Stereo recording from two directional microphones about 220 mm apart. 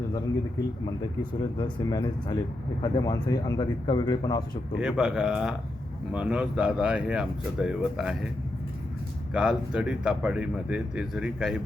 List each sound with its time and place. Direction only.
0.9 s speech: 20° left (ahead or behind)
4.8 s speech: 5° right (ahead or behind)
9.3 s speech: 5° right (ahead or behind)